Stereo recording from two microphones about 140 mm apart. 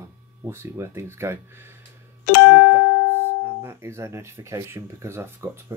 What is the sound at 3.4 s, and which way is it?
Speech, 15° right (ahead or behind).